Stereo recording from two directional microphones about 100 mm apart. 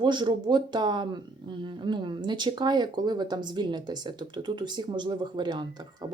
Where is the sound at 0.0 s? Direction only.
50° right (ahead or behind).